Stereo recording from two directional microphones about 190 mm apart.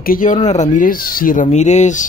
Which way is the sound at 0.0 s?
45° left (ahead or behind).